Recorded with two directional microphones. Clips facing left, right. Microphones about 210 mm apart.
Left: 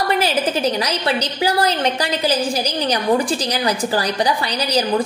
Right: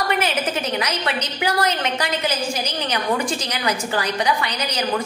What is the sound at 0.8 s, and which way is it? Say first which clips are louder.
A woman's voice: left 4 dB; 35° left (ahead or behind).